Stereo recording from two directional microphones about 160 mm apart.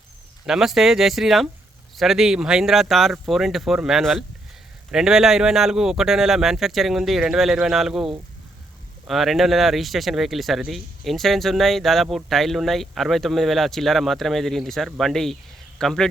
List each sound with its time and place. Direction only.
0.4 s speech: 5° right (ahead or behind)